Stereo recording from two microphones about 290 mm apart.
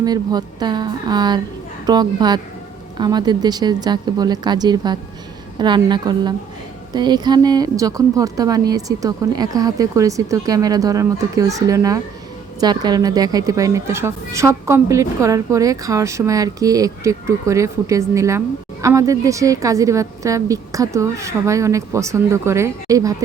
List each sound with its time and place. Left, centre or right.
0.0 s speech: centre